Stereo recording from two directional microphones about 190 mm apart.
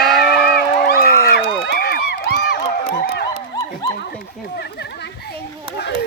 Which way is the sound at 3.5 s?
20° left (ahead or behind).